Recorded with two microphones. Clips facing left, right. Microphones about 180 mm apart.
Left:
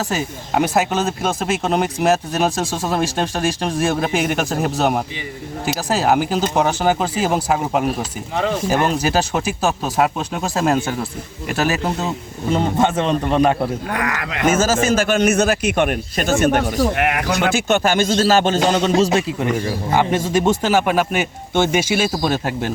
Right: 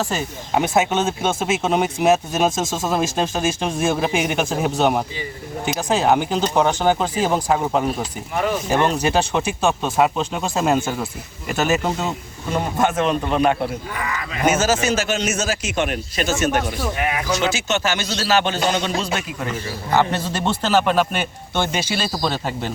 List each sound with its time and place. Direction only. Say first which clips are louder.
0.1 s speech: left 1 dB; centre (ahead or behind)
12.8 s speech: left 2 dB; 30° left (ahead or behind)
13.9 s speech: left 4 dB; 80° left
14.6 s a man's voice: left 3 dB; 45° left (ahead or behind)
16.9 s a man's voice: left 3 dB; 75° left (ahead or behind); by 19.2 s 35° left (ahead or behind)
19.9 s speech: left 2 dB; 15° left (ahead or behind)